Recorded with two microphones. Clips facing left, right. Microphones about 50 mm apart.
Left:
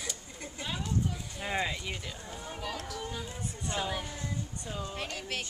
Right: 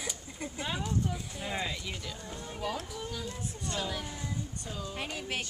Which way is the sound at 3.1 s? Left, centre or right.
Centre.